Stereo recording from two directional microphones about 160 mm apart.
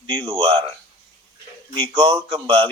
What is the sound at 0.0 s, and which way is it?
Speech, 30° right (ahead or behind).